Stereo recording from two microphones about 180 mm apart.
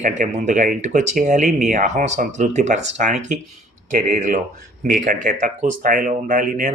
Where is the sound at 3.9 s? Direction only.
45° right (ahead or behind).